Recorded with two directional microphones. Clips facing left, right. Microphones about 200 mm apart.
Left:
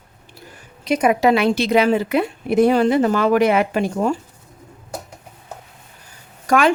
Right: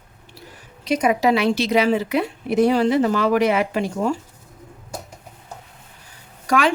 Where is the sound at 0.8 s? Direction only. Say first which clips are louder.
Left 2 dB; 55° left (ahead or behind).